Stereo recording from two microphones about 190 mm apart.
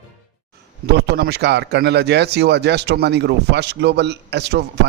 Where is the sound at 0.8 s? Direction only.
60° right (ahead or behind).